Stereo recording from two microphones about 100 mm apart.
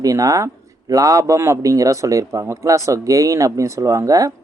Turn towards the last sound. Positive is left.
turn(degrees=-35)  # may be behind; listen again after turning